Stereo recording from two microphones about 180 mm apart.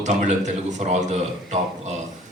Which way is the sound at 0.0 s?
40° right (ahead or behind).